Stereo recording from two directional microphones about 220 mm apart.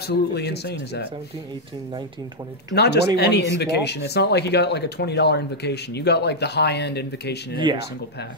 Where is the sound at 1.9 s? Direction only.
20° right (ahead or behind).